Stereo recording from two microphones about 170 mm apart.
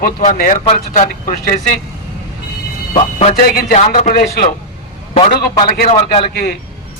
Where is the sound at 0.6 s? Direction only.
40° left (ahead or behind).